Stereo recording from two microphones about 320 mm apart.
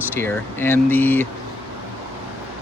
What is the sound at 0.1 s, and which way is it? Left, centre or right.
Speech, centre.